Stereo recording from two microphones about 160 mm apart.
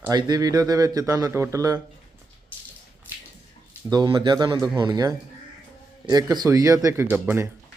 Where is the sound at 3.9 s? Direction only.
25° right (ahead or behind).